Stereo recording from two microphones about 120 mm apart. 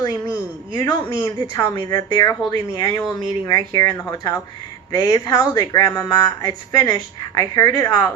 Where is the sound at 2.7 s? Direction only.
30° left (ahead or behind).